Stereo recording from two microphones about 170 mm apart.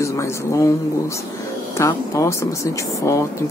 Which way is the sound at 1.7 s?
20° left (ahead or behind).